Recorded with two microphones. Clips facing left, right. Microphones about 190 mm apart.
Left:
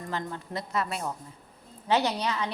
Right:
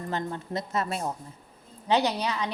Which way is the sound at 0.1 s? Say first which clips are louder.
Right 3 dB; 25° right (ahead or behind).